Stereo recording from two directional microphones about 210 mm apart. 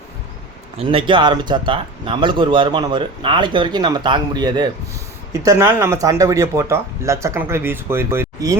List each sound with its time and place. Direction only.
0.8 s speech: 25° right (ahead or behind)